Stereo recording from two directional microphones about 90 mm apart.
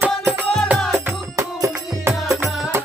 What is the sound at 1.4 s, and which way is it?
Music, 35° right (ahead or behind).